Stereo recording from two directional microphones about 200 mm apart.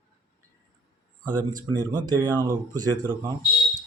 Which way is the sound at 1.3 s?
20° right (ahead or behind).